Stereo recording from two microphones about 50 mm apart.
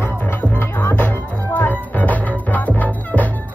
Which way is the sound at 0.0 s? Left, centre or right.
Left.